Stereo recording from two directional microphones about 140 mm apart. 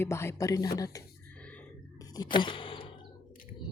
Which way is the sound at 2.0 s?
30° left (ahead or behind).